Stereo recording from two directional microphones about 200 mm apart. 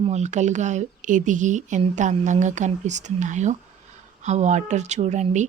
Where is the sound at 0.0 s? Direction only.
35° right (ahead or behind).